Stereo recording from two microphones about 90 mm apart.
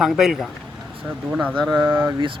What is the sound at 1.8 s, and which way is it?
Speech, 25° right (ahead or behind).